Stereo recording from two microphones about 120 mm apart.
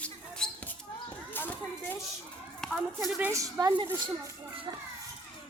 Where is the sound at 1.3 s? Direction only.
15° left (ahead or behind).